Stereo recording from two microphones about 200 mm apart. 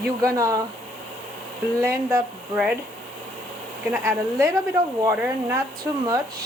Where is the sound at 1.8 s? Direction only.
15° right (ahead or behind).